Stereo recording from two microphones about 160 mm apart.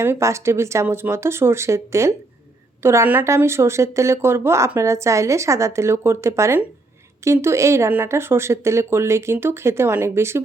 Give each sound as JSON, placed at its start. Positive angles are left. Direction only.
{"t": 0.0, "sound": "speech", "side_deg": -15}